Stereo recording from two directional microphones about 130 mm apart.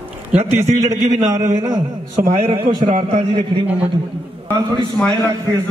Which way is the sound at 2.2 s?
90° right.